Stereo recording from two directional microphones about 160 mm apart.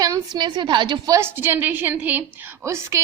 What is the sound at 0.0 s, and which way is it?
A woman's voice, 25° right (ahead or behind).